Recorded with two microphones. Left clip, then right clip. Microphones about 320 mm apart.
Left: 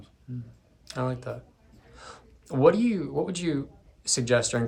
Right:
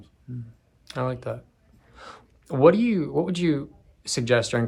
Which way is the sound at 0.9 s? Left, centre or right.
Right.